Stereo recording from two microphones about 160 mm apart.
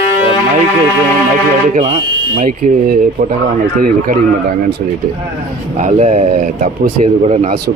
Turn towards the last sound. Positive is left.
turn(degrees=-50)  # may be behind; listen again after turning